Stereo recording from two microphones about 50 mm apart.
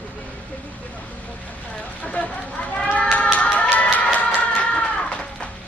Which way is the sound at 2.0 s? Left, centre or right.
Left.